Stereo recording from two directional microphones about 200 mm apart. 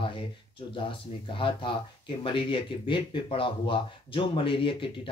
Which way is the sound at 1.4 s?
25° left (ahead or behind).